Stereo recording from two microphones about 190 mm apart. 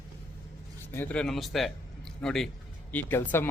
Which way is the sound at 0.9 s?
5° left (ahead or behind).